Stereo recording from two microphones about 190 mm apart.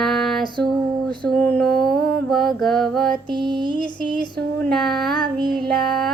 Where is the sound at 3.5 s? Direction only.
25° right (ahead or behind).